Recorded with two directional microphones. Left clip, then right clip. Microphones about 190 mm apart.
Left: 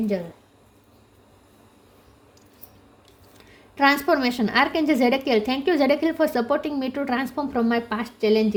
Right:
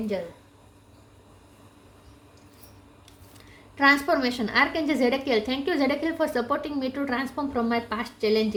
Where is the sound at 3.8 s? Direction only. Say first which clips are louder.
Left 1 dB; 40° left (ahead or behind).